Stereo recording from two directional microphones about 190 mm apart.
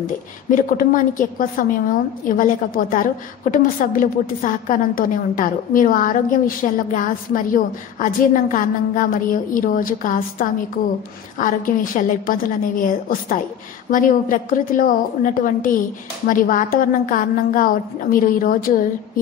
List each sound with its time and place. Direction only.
0.5 s a woman's voice: 45° left (ahead or behind)